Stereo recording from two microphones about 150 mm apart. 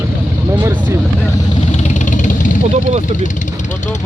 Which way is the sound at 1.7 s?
50° left (ahead or behind).